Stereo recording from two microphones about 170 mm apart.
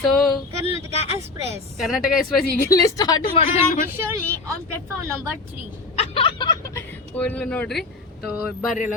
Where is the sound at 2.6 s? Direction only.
20° left (ahead or behind).